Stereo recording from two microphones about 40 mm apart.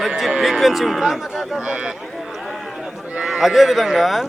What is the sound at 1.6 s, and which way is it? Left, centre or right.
Speech, right.